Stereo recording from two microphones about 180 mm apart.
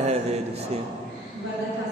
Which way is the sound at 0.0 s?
35° right (ahead or behind).